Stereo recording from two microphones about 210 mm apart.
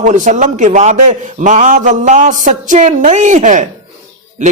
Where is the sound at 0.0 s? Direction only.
35° right (ahead or behind).